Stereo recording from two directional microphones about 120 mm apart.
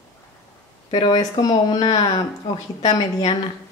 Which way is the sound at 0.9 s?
35° left (ahead or behind).